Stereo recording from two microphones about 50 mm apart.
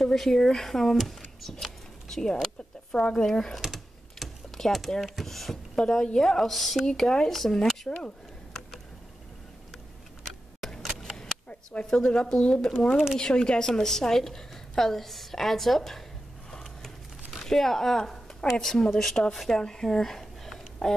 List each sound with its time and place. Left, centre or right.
0.0 s a woman's voice: centre
3.6 s typing: centre
4.6 s a woman's voice: centre
10.6 s a sound: centre
11.0 s vehicle: centre
11.8 s a woman's voice: centre
16.4 s a sound: centre
17.5 s a woman's voice: centre
19.6 s a sound: centre